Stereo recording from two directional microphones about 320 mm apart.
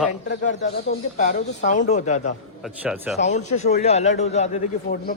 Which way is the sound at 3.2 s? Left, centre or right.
Left.